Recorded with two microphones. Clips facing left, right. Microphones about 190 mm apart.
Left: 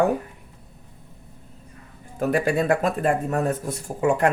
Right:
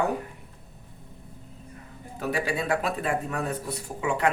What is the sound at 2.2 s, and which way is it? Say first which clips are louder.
Speech: left 7 dB; 50° left (ahead or behind).